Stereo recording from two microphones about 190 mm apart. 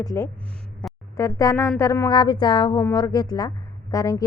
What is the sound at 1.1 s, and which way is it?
Speech, 15° left (ahead or behind).